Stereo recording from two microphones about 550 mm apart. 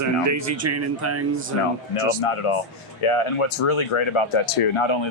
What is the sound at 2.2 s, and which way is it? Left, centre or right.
A man's voice, left.